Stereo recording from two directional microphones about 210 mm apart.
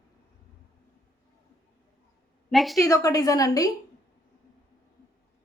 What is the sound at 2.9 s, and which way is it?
Speech, 15° left (ahead or behind).